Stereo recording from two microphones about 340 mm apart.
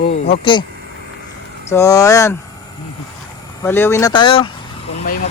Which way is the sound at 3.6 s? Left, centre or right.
Centre.